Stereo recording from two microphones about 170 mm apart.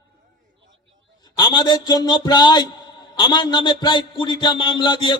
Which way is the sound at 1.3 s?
25° left (ahead or behind).